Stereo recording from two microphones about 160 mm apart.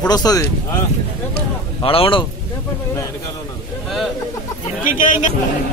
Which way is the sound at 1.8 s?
35° left (ahead or behind).